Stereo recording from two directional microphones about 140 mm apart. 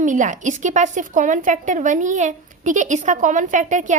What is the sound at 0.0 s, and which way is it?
A woman's voice, 65° right (ahead or behind).